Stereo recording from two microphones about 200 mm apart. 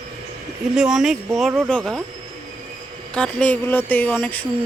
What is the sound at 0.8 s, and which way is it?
Speech, 5° right (ahead or behind).